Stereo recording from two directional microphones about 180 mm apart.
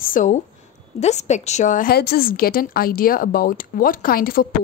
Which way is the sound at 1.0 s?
40° left (ahead or behind).